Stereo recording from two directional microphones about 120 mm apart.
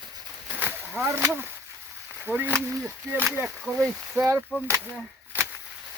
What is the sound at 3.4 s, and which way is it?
Speech, 10° right (ahead or behind).